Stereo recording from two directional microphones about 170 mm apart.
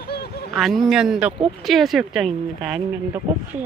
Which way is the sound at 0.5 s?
Centre (ahead or behind).